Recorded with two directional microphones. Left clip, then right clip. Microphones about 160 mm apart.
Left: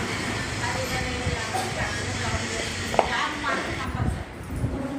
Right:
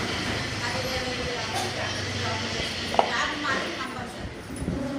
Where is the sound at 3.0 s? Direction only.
75° left (ahead or behind).